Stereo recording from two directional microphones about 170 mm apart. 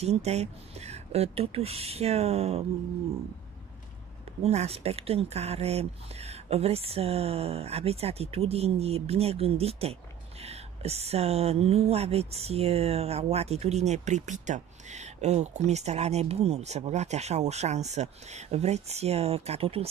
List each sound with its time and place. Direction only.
0.0 s speech: 40° right (ahead or behind)
4.4 s speech: 40° right (ahead or behind)